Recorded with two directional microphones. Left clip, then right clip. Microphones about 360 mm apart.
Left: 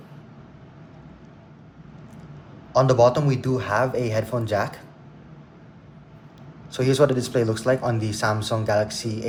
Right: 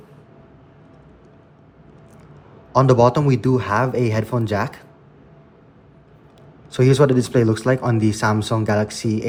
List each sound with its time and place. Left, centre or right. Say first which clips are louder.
2.7 s speech: right 2 dB; centre
6.7 s speech: right 4 dB; centre